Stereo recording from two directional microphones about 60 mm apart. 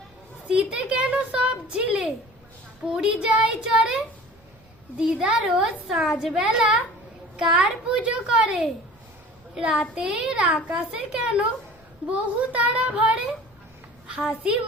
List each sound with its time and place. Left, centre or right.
0.4 s a child's voice: centre
9.9 s a child's voice: centre